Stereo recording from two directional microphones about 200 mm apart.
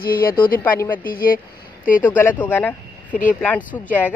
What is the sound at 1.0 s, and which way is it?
Speech, 45° left (ahead or behind).